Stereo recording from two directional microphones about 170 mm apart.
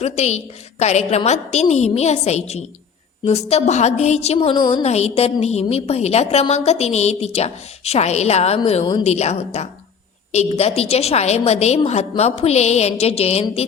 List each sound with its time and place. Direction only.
0.0 s a woman's voice: 40° left (ahead or behind)
9.0 s a woman's voice: 40° left (ahead or behind)